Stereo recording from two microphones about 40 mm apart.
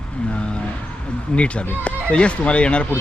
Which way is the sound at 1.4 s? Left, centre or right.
Left.